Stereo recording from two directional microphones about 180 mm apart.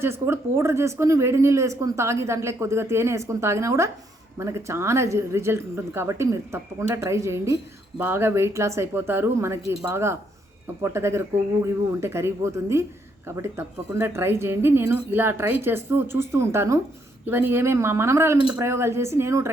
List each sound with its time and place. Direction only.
0.0 s speech: 15° right (ahead or behind)